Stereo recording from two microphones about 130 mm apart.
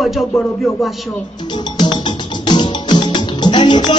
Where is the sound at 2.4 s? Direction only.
35° left (ahead or behind).